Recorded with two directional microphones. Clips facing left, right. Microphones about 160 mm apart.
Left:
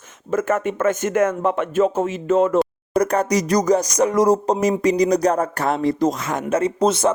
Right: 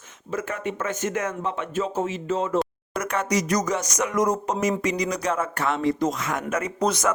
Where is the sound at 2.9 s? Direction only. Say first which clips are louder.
Left 7 dB; 35° left (ahead or behind).